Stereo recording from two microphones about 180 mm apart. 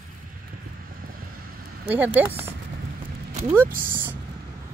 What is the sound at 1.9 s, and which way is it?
Speech, 10° right (ahead or behind).